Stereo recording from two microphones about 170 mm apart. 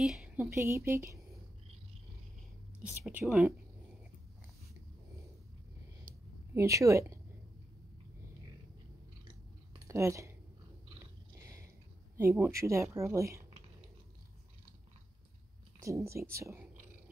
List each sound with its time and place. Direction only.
0.0 s a woman's voice: 5° right (ahead or behind)
0.6 s speech: 15° right (ahead or behind)
2.8 s speech: 10° right (ahead or behind)
6.5 s speech: 15° right (ahead or behind)
9.8 s speech: 15° right (ahead or behind)
12.2 s speech: 15° right (ahead or behind)
15.8 s speech: 15° right (ahead or behind)